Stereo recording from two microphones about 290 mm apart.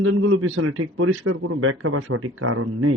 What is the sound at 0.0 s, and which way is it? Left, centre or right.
A man's voice, right.